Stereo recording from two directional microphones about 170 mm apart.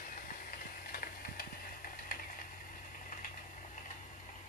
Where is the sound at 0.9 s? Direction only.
60° left (ahead or behind).